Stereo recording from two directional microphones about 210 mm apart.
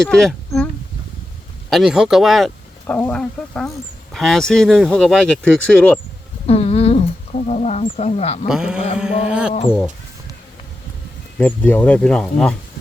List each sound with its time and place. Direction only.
0.0 s speech: centre (ahead or behind)
1.7 s speech: 5° right (ahead or behind)
6.5 s a sound: 30° left (ahead or behind)
8.4 s speech: 5° right (ahead or behind)
11.3 s speech: 10° left (ahead or behind)